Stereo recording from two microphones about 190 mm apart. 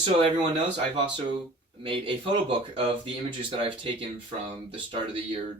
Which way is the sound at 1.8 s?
25° right (ahead or behind).